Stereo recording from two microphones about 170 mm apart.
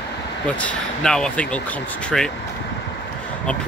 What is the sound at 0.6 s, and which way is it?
Speech, 5° left (ahead or behind).